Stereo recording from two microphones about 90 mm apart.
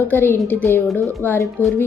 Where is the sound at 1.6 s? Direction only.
20° left (ahead or behind).